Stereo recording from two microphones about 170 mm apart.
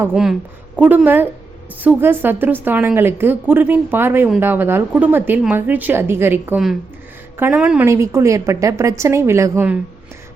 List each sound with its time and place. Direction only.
0.0 s a woman's voice: 5° right (ahead or behind)